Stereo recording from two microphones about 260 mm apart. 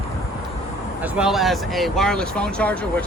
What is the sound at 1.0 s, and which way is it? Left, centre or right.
Speech, centre.